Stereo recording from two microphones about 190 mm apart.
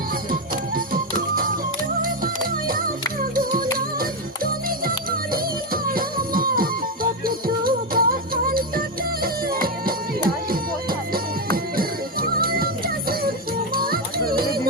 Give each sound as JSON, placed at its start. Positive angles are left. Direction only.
{"t": 0.3, "sound": "music", "side_deg": -50}